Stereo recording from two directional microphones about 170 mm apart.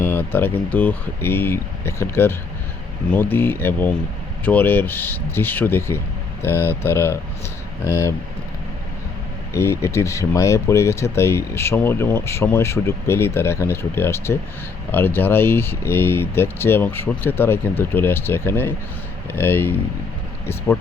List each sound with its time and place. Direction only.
0.0 s a sound: 10° left (ahead or behind)
0.3 s speech: 10° left (ahead or behind)
9.5 s speech: 15° left (ahead or behind)